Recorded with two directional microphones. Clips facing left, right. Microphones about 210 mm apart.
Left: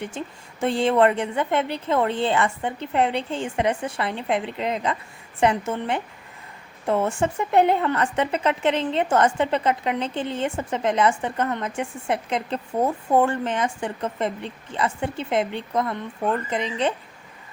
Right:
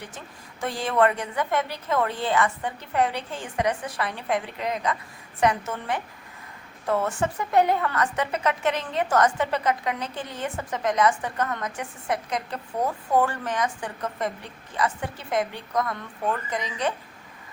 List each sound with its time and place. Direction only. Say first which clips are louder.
0.2 s speech: left 4 dB; 25° left (ahead or behind)